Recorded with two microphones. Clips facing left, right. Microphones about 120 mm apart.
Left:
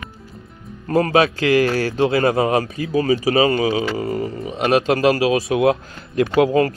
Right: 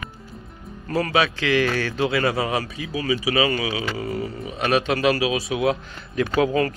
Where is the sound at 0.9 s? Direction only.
40° left (ahead or behind).